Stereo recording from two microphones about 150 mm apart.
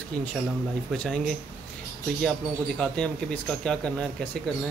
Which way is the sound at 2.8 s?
5° left (ahead or behind).